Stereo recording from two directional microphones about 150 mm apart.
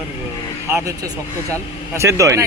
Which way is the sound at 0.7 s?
20° right (ahead or behind).